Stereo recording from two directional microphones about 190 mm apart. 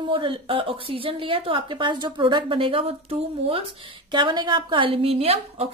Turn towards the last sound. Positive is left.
turn(degrees=-30)  # may be behind; listen again after turning